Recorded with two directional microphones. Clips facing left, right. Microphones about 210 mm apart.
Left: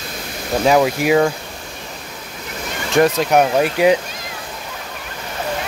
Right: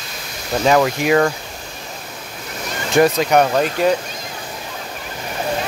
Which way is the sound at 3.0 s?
Centre (ahead or behind).